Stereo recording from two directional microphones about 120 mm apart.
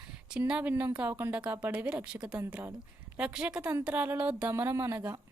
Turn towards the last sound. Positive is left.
turn(degrees=-20)  # may be behind; listen again after turning